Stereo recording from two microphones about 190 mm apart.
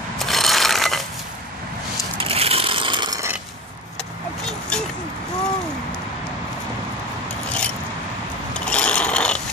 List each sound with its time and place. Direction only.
0.2 s rub: centre (ahead or behind)
2.1 s coin: 30° right (ahead or behind)
4.5 s a sound: 5° left (ahead or behind)
8.5 s mechanisms: 5° left (ahead or behind)